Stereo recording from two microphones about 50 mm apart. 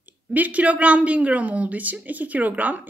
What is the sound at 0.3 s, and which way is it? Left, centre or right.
A woman's voice, right.